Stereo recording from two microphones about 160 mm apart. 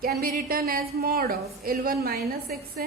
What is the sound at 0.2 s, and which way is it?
A woman's voice, 70° right (ahead or behind).